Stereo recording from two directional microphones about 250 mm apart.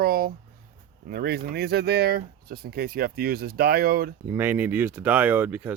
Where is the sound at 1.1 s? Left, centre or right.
Right.